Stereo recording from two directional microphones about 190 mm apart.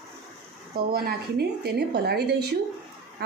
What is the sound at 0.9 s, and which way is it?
A woman's voice, 55° right (ahead or behind).